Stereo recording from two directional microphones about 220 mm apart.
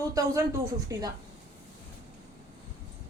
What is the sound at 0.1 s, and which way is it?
Speech, 15° right (ahead or behind).